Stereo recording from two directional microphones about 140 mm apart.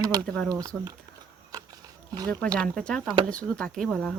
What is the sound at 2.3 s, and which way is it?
Speech, 10° left (ahead or behind).